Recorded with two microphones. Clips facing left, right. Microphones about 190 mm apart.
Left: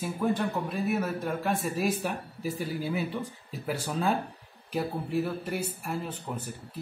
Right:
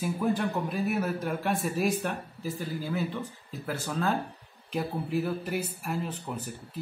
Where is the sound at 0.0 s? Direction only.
Centre (ahead or behind).